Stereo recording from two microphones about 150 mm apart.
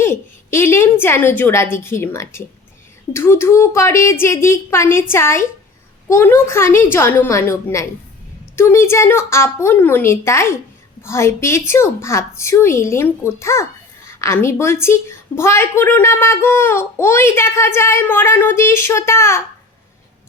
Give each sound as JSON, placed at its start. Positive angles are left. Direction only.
{"t": 0.0, "sound": "a woman's voice", "side_deg": 15}